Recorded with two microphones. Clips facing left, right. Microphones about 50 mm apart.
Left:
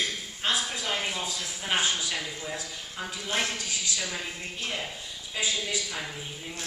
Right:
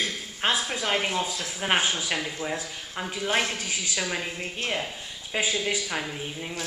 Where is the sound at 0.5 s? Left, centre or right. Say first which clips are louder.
Right 3 dB; right.